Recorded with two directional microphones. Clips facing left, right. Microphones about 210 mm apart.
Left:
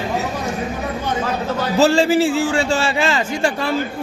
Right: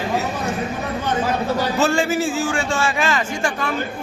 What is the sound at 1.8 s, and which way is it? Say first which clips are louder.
A man's voice: left 7 dB; 30° left (ahead or behind).